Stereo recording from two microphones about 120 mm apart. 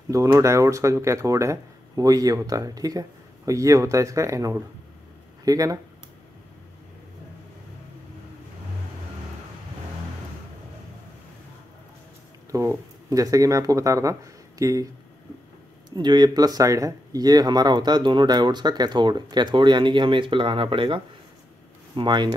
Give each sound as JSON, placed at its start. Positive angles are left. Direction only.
{"t": 0.1, "sound": "speech", "side_deg": -25}
{"t": 12.4, "sound": "speech", "side_deg": -25}
{"t": 16.0, "sound": "speech", "side_deg": -35}